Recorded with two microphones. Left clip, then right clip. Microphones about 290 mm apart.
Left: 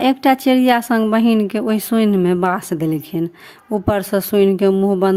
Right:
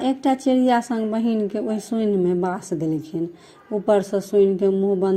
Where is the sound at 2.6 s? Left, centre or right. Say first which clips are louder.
Left 4 dB; left.